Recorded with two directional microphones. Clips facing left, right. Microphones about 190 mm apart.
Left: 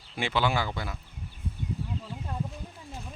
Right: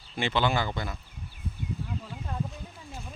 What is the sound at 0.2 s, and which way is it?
Speech, 10° left (ahead or behind).